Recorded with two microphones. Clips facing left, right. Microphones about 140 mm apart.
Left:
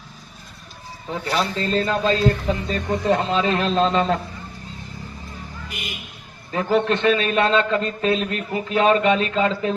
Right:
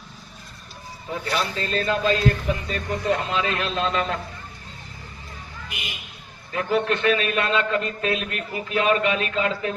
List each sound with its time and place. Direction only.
1.2 s speech: 30° left (ahead or behind)
5.6 s speech: 45° left (ahead or behind)
6.5 s a man's voice: 30° left (ahead or behind)